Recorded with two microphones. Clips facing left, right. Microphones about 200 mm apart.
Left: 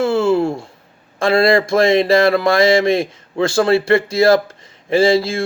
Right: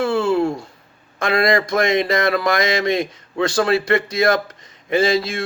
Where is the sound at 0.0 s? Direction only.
25° left (ahead or behind).